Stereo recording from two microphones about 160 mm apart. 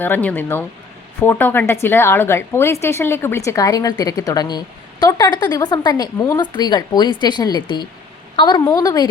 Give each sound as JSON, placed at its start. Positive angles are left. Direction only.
{"t": 0.0, "sound": "speech", "side_deg": 10}